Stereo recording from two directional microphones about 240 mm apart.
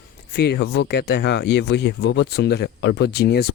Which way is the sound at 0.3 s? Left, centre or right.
Left.